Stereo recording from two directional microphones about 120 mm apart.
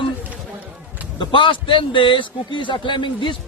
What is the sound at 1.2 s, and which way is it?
A man's voice, 45° left (ahead or behind).